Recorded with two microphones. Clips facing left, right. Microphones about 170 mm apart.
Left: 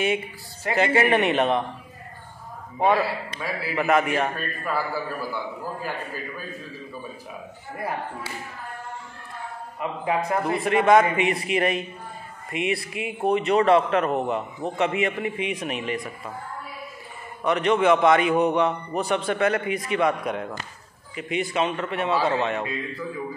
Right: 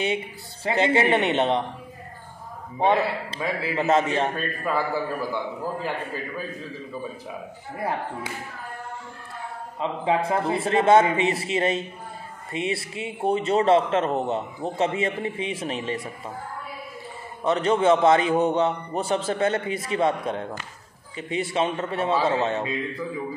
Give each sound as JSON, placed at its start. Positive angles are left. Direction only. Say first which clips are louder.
{"t": 0.7, "sound": "a man's voice", "louder": "even", "side_deg": -25}
{"t": 2.8, "sound": "a man's voice", "louder": "even", "side_deg": -25}
{"t": 9.8, "sound": "a man's voice", "louder": "right 2 dB", "side_deg": -25}
{"t": 17.4, "sound": "a man's voice", "louder": "even", "side_deg": -30}